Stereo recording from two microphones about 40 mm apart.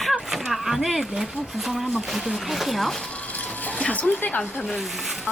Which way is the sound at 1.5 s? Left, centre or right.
Centre.